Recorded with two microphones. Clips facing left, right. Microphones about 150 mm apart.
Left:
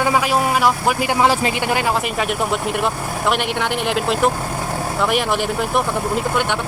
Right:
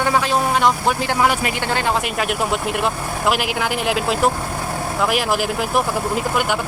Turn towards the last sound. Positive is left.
turn(degrees=-5)  # may be behind; listen again after turning